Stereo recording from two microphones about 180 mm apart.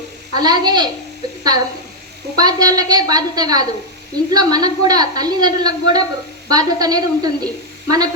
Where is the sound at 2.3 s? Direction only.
20° right (ahead or behind).